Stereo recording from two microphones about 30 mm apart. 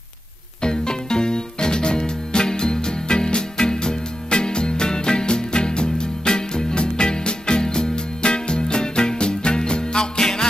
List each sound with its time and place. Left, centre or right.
0.6 s music: left